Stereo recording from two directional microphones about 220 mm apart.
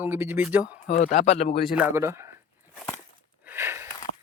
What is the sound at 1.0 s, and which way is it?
Speech, 35° left (ahead or behind).